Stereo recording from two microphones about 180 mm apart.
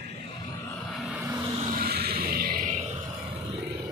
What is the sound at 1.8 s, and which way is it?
Music, 60° right (ahead or behind).